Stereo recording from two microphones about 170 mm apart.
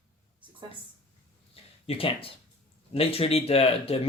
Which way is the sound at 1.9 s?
35° left (ahead or behind).